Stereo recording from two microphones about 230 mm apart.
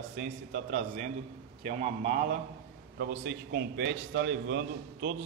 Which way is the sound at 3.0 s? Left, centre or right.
Right.